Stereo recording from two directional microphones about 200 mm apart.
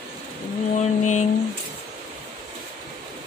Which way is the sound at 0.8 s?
35° left (ahead or behind).